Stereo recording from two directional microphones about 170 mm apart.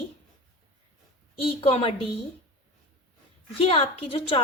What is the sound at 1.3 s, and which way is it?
Speech, 35° left (ahead or behind).